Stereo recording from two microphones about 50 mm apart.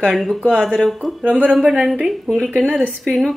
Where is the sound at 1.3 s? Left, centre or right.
Right.